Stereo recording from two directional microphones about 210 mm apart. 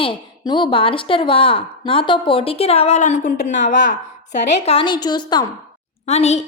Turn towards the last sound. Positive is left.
turn(degrees=30)  # may be behind; listen again after turning